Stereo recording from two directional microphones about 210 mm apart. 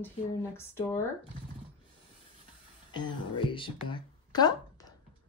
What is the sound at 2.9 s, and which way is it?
Speech, 20° left (ahead or behind).